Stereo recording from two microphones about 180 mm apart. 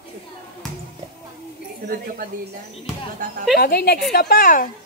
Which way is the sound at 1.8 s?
50° right (ahead or behind).